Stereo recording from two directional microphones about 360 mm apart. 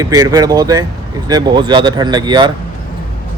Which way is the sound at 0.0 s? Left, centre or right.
Centre.